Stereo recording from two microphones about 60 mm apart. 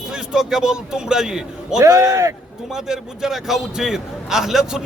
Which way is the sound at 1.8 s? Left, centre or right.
Right.